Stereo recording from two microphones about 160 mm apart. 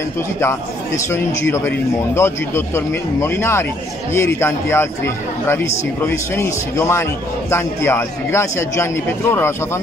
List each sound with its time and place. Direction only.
0.4 s a man's voice: 15° left (ahead or behind)